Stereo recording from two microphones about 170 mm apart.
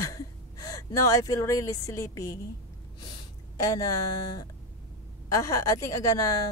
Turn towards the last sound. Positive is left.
turn(degrees=20)  # may be behind; listen again after turning